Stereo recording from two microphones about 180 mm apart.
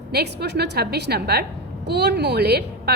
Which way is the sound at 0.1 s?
65° right (ahead or behind).